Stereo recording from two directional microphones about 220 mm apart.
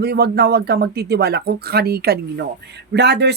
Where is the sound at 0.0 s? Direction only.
50° right (ahead or behind).